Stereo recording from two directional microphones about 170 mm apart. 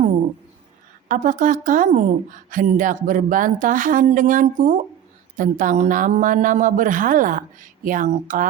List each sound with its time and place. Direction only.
1.0 s a woman's voice: 50° right (ahead or behind)